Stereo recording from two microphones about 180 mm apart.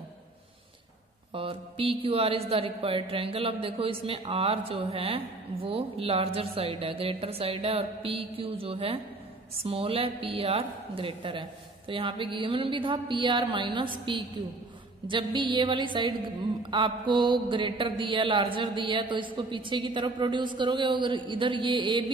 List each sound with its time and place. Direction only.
1.3 s speech: 30° right (ahead or behind)
11.9 s mantra: 30° right (ahead or behind)